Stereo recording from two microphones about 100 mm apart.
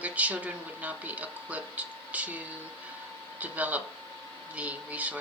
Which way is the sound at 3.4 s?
15° right (ahead or behind).